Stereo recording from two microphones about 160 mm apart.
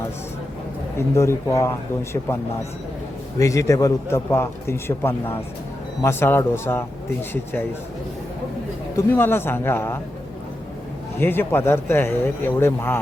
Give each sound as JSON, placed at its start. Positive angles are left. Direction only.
{"t": 0.9, "sound": "speech", "side_deg": 15}
{"t": 3.3, "sound": "a man's voice", "side_deg": 20}
{"t": 9.0, "sound": "speech", "side_deg": 15}
{"t": 11.2, "sound": "speech", "side_deg": 15}